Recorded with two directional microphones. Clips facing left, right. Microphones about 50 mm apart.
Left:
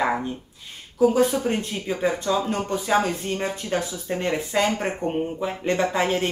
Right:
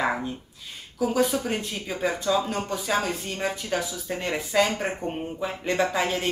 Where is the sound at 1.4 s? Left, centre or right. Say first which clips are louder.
Left 4 dB; centre.